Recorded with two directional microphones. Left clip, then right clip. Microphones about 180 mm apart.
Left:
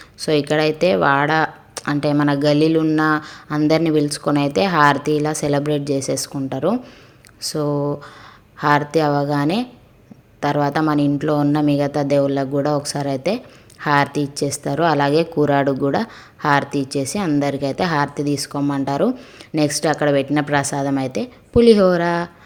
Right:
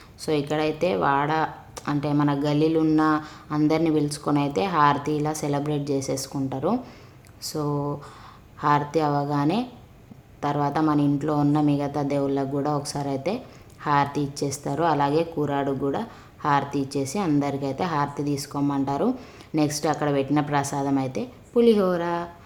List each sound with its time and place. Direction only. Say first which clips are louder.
0.2 s a woman's voice: left 7 dB; 25° left (ahead or behind)